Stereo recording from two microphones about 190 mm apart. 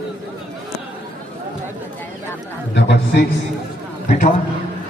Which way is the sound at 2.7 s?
65° left (ahead or behind).